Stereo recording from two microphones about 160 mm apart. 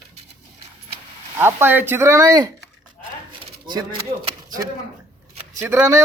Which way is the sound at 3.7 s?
25° right (ahead or behind).